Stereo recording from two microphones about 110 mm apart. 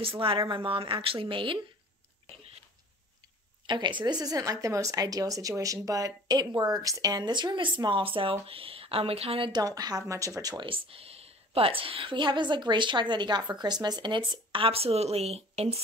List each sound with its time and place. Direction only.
0.0 s a woman's voice: 55° right (ahead or behind)
3.6 s speech: 45° right (ahead or behind); by 9.5 s 65° right (ahead or behind)
9.5 s speech: 35° right (ahead or behind)
10.6 s a woman's voice: 55° right (ahead or behind)